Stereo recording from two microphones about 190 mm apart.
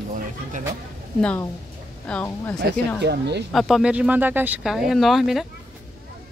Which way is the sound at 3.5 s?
Centre (ahead or behind).